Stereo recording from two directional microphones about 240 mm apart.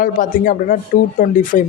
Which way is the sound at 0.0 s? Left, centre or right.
Left.